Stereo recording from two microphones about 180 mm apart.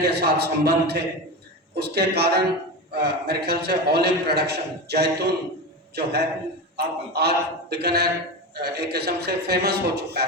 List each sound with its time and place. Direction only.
0.0 s a man's voice: 65° right (ahead or behind)